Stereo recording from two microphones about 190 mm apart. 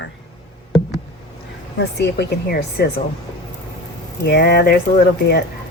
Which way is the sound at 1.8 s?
60° left (ahead or behind).